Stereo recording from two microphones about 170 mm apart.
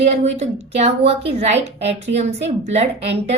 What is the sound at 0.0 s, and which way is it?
A woman's voice, 40° right (ahead or behind).